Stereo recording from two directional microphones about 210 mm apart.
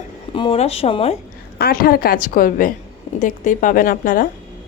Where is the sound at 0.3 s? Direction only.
25° left (ahead or behind).